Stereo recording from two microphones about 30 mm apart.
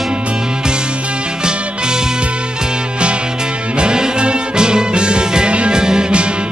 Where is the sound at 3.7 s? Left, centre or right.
Right.